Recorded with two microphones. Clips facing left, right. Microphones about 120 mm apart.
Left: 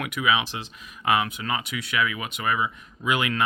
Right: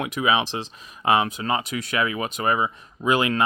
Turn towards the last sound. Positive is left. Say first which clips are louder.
# right 4 dB
turn(degrees=-30)  # may be behind; listen again after turning